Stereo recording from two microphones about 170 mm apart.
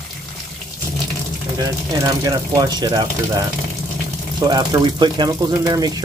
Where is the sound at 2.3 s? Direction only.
20° right (ahead or behind).